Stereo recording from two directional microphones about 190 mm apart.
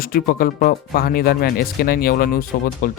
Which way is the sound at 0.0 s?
50° left (ahead or behind).